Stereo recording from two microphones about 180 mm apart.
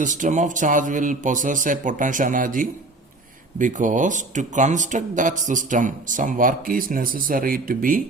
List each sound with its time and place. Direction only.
0.0 s speech: 45° right (ahead or behind)